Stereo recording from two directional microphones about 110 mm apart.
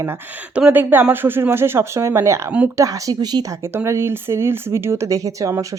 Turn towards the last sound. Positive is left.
turn(degrees=-30)  # may be behind; listen again after turning